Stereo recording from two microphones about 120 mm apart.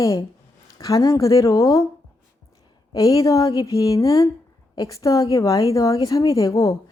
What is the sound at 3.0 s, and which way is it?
A woman's voice, 30° left (ahead or behind).